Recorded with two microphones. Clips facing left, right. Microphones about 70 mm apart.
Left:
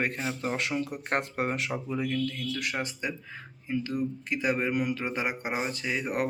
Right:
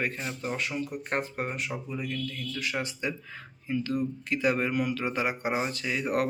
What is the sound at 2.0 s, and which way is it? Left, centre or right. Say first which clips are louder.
Speech: left 4 dB; left.